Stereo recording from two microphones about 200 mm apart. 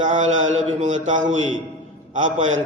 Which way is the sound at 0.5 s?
35° right (ahead or behind).